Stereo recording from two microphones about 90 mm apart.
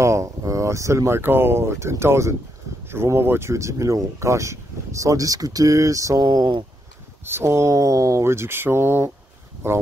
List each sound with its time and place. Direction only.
0.0 s speech: 35° right (ahead or behind)
7.2 s speech: 30° right (ahead or behind)